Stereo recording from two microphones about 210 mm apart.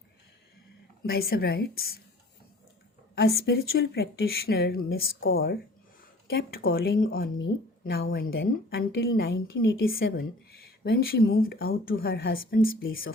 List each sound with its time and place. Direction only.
1.0 s a woman's voice: 45° left (ahead or behind)
3.2 s a woman's voice: 50° left (ahead or behind)